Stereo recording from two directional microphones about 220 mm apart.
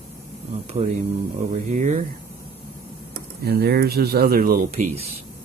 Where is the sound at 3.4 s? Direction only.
45° right (ahead or behind).